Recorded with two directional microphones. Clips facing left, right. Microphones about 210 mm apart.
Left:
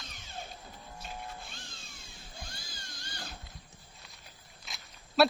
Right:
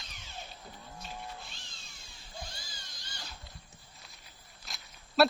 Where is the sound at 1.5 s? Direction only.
55° left (ahead or behind).